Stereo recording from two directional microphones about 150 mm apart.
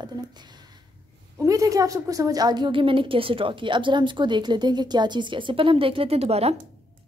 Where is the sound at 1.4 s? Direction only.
20° right (ahead or behind).